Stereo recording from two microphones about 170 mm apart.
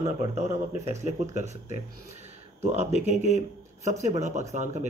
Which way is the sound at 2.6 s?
40° right (ahead or behind).